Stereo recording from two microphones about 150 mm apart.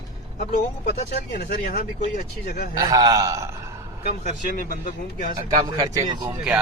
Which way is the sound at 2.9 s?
25° right (ahead or behind).